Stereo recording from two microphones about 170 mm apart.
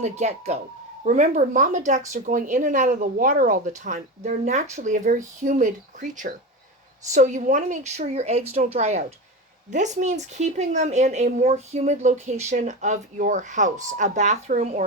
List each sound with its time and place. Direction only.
0.0 s speech: 40° right (ahead or behind)